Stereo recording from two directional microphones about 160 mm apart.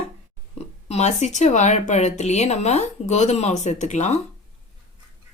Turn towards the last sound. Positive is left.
turn(degrees=45)  # may be behind; listen again after turning